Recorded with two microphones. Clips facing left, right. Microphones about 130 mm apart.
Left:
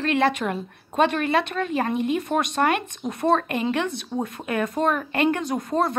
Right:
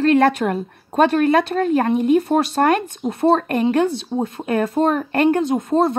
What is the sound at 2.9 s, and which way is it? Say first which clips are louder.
Speech: right 5 dB; 30° right (ahead or behind).